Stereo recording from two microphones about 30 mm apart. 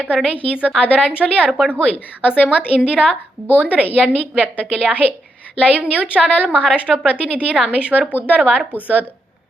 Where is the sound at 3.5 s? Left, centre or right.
Right.